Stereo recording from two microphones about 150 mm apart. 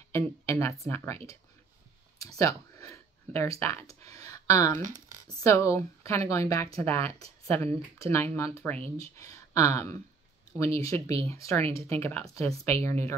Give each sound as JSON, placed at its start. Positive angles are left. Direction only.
{"t": 0.1, "sound": "speech", "side_deg": 20}
{"t": 2.1, "sound": "a sound", "side_deg": 20}
{"t": 3.3, "sound": "speech", "side_deg": 20}